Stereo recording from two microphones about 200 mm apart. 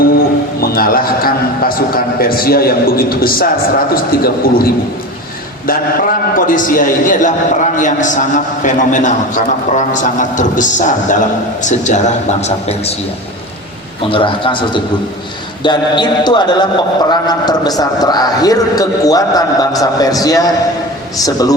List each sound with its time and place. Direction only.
0.0 s music: 45° left (ahead or behind)
3.9 s a man's voice: 50° left (ahead or behind); by 12.9 s 30° left (ahead or behind)
14.1 s a man's voice: 25° left (ahead or behind)